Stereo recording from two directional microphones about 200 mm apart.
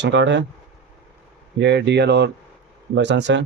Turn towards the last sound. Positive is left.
turn(degrees=-65)  # may be behind; listen again after turning